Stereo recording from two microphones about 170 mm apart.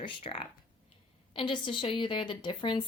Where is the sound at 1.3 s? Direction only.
30° left (ahead or behind).